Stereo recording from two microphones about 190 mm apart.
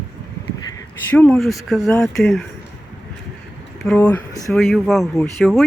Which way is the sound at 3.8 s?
5° left (ahead or behind).